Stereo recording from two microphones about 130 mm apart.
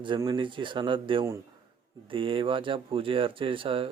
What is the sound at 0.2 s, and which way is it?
Speech, 35° right (ahead or behind).